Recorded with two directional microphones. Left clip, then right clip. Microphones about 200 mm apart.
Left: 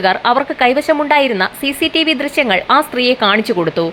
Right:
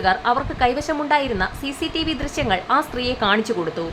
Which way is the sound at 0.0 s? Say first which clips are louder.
Left 6 dB; 20° left (ahead or behind).